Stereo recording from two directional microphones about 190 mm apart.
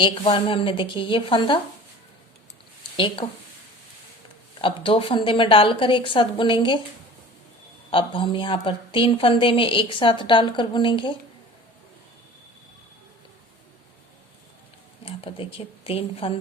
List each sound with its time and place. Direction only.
0.0 s a woman's voice: 25° left (ahead or behind)
2.9 s speech: 25° left (ahead or behind)
4.6 s a woman's voice: 25° left (ahead or behind)
7.9 s a woman's voice: 25° left (ahead or behind)
15.0 s speech: 30° left (ahead or behind)